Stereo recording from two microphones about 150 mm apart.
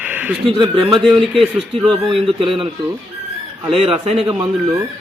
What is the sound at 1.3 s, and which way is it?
Speech, centre (ahead or behind).